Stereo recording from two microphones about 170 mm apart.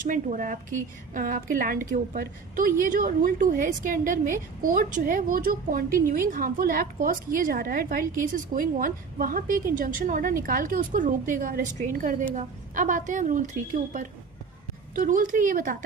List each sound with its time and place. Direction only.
0.0 s a woman's voice: 50° right (ahead or behind)